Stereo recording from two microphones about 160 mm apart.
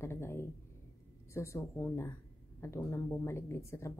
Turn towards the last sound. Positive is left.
turn(degrees=15)  # may be behind; listen again after turning